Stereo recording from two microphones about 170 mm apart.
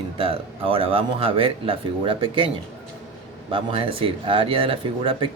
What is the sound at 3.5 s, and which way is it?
Speech, 30° right (ahead or behind).